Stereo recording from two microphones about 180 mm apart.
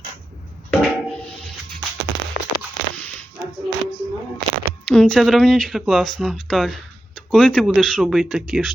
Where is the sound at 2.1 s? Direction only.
75° right (ahead or behind).